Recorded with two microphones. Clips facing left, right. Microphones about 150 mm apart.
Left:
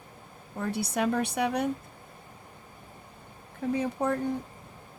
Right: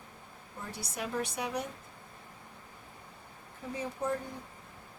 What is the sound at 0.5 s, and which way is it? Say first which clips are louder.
Speech: left 11 dB; 65° left (ahead or behind).